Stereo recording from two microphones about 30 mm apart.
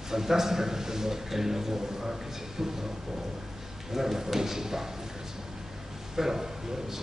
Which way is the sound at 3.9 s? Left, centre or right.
Centre.